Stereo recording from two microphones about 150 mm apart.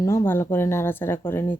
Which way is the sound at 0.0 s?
20° left (ahead or behind).